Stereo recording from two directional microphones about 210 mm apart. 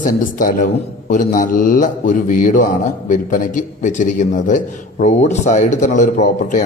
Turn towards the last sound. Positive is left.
turn(degrees=35)  # may be behind; listen again after turning